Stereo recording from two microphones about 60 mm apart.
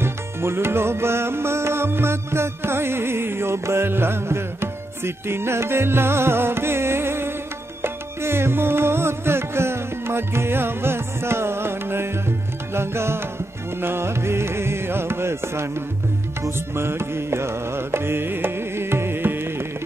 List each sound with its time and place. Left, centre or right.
0.0 s music: right